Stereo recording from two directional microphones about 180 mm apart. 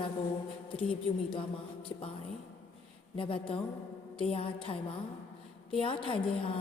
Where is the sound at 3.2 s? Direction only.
30° left (ahead or behind).